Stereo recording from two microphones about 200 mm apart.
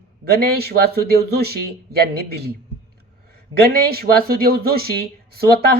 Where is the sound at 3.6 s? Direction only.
50° right (ahead or behind).